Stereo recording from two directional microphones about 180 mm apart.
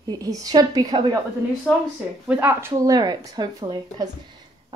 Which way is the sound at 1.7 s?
10° left (ahead or behind).